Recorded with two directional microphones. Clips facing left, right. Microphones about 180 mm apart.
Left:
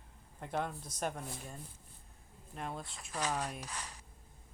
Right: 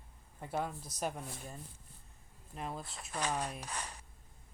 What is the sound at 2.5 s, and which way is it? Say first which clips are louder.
Speech: even; centre (ahead or behind).